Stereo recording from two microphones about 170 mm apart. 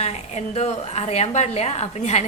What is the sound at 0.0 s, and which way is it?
A woman's voice, 40° left (ahead or behind).